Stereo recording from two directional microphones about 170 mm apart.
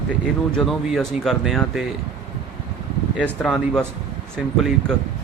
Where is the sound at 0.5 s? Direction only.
Centre (ahead or behind).